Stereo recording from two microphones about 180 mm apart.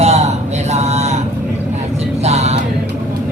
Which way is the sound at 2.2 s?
35° right (ahead or behind).